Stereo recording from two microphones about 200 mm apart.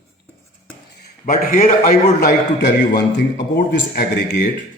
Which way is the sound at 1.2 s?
45° left (ahead or behind).